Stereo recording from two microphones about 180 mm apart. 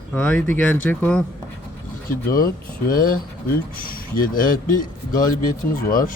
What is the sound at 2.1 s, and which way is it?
Speech, 55° left (ahead or behind).